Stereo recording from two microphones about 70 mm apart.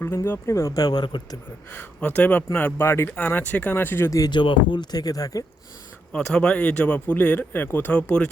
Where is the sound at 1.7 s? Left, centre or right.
Left.